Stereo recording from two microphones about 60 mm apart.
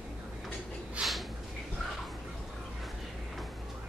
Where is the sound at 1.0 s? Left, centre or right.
Right.